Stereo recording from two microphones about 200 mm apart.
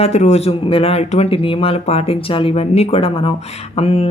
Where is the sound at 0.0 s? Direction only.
35° left (ahead or behind).